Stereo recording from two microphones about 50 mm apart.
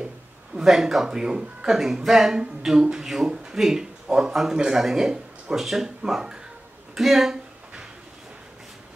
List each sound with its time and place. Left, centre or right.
0.6 s speech: centre